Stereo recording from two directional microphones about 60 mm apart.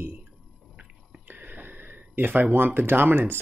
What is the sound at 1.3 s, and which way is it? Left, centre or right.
Speech, right.